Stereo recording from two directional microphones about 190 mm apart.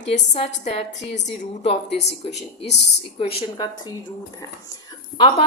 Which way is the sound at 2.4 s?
35° left (ahead or behind).